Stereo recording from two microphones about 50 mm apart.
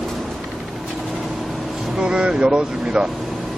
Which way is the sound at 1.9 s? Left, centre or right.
Centre.